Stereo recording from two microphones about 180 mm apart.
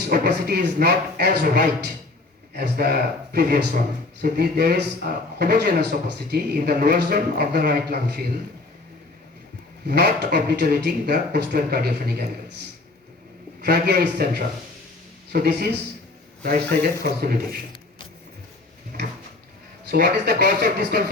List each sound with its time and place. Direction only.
0.1 s speech: 60° right (ahead or behind)
9.8 s speech: 65° right (ahead or behind)
19.9 s speech: 65° right (ahead or behind)